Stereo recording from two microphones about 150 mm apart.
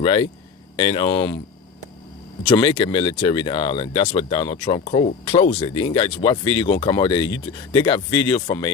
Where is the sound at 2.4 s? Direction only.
30° left (ahead or behind).